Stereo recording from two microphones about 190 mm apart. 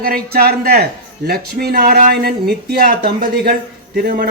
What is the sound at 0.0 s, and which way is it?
A man's voice, 55° right (ahead or behind).